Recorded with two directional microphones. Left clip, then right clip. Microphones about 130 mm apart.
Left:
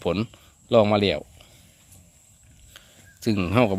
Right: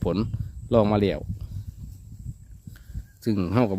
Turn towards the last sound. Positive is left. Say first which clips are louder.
# left 3 dB
turn(degrees=-40)  # may be behind; listen again after turning